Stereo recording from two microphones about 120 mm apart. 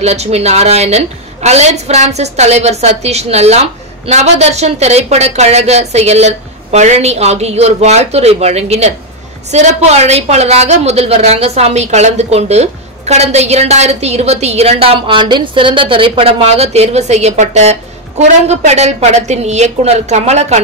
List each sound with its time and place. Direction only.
0.0 s a woman's voice: 60° right (ahead or behind)